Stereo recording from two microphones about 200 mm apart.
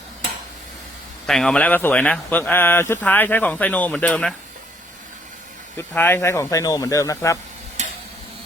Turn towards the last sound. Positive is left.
turn(degrees=-35)  # may be behind; listen again after turning